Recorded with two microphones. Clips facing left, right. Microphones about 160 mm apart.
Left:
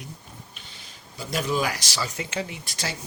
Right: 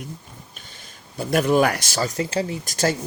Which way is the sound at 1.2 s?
55° right (ahead or behind).